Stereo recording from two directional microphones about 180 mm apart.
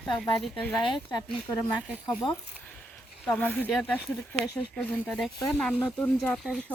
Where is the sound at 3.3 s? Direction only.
5° left (ahead or behind).